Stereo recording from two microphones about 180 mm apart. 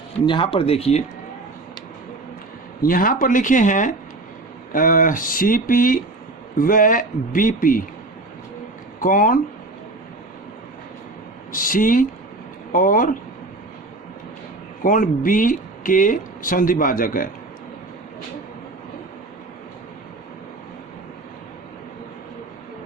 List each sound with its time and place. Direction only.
0.3 s speech: 30° left (ahead or behind)
2.8 s speech: 50° left (ahead or behind)
9.0 s speech: 50° left (ahead or behind)
11.5 s speech: 50° left (ahead or behind)
14.8 s speech: 50° left (ahead or behind)